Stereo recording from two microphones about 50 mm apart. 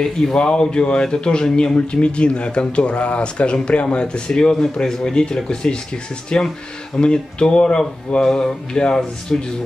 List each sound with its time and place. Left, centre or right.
0.0 s speech: centre